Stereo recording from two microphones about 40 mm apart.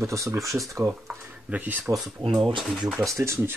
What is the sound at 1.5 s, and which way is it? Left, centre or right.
Speech, right.